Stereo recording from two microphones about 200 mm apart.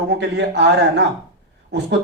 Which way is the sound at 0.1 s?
60° right (ahead or behind).